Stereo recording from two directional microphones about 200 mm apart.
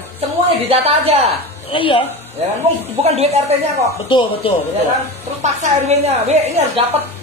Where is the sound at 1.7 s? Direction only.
25° left (ahead or behind).